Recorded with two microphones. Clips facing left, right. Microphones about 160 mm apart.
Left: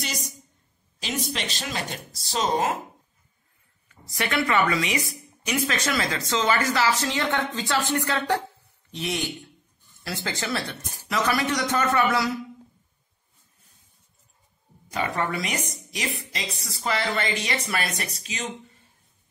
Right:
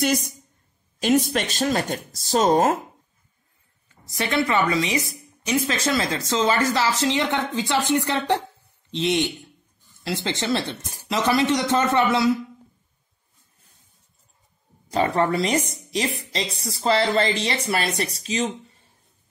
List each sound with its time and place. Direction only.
0.0 s a woman's voice: 55° right (ahead or behind)
1.3 s speech: 50° right (ahead or behind)
4.2 s a woman's voice: 30° right (ahead or behind)
7.0 s speech: 20° right (ahead or behind)
14.9 s a woman's voice: 30° right (ahead or behind)